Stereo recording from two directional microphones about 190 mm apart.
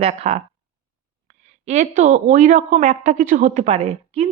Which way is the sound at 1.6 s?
35° right (ahead or behind).